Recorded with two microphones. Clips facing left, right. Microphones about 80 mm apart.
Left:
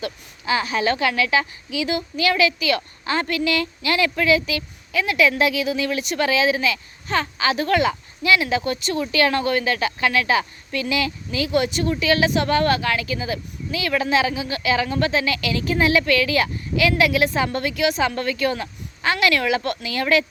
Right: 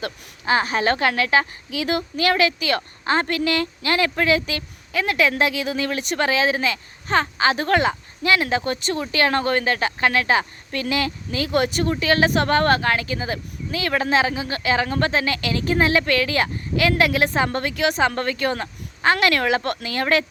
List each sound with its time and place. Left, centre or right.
0.0 s a woman's voice: right